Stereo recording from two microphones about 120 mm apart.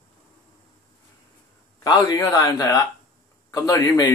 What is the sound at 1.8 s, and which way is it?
A man's voice, 35° left (ahead or behind).